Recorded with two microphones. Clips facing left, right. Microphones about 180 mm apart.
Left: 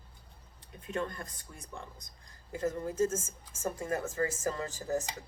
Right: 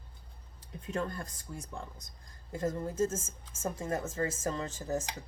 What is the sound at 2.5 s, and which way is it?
Speech, 30° right (ahead or behind).